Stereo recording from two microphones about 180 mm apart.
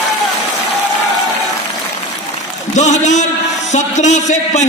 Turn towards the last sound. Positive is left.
turn(degrees=40)  # may be behind; listen again after turning